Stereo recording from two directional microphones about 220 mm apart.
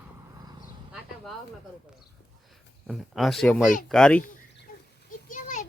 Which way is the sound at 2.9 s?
Centre (ahead or behind).